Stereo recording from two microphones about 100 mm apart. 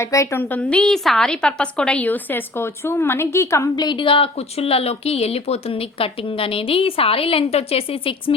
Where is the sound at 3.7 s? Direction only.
50° left (ahead or behind); by 8.3 s 65° left (ahead or behind).